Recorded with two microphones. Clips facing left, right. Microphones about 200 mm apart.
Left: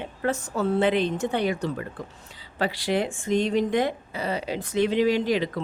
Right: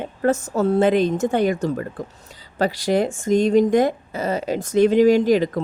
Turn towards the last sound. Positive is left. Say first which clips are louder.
# right 7 dB
turn(degrees=-45)  # may be behind; listen again after turning